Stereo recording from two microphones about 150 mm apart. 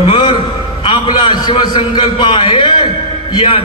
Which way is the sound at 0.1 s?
35° left (ahead or behind).